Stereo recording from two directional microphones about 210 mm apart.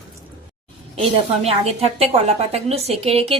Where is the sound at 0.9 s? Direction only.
30° right (ahead or behind).